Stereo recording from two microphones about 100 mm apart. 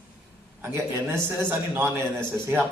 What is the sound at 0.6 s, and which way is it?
A man's voice, 20° right (ahead or behind).